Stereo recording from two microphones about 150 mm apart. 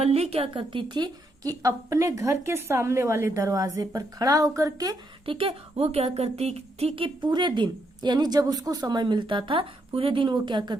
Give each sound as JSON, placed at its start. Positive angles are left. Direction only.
{"t": 0.0, "sound": "a woman's voice", "side_deg": -45}
{"t": 5.2, "sound": "a woman's voice", "side_deg": -35}